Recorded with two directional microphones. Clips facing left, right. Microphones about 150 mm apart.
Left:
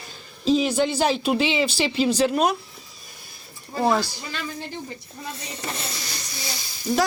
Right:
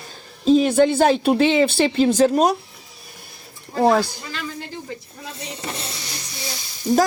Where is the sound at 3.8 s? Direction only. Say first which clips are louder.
Right 5 dB; 45° right (ahead or behind).